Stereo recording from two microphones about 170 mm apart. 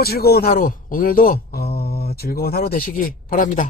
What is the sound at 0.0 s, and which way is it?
A man's voice, 65° left (ahead or behind).